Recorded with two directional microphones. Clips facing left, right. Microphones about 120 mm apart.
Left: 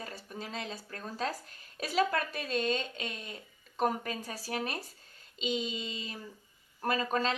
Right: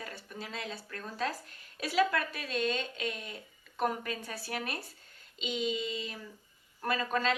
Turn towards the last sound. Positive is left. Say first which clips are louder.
# left 1 dB
turn(degrees=35)  # may be behind; listen again after turning